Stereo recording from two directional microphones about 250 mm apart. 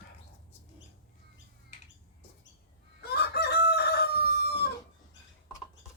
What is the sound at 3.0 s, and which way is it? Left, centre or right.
Chicken, left.